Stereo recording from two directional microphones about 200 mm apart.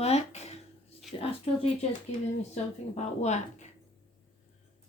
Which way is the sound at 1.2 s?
30° left (ahead or behind).